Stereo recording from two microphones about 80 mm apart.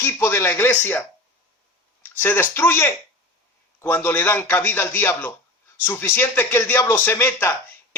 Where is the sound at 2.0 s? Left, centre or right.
Left.